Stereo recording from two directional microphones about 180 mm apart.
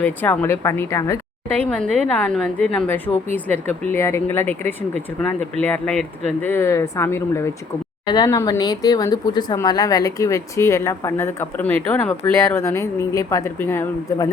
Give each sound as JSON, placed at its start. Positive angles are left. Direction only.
{"t": 0.0, "sound": "speech", "side_deg": 10}